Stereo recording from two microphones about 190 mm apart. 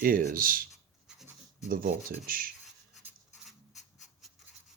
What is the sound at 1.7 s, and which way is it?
Speech, 55° right (ahead or behind).